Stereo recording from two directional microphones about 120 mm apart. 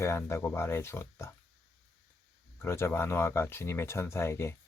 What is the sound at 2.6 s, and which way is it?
Speech, 20° left (ahead or behind).